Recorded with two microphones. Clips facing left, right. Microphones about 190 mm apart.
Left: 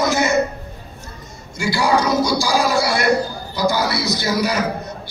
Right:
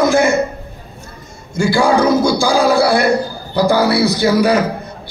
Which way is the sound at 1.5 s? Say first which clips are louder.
Right 5 dB; 55° right (ahead or behind).